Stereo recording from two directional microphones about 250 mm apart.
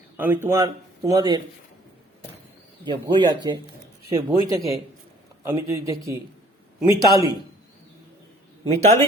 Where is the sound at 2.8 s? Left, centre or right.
Centre.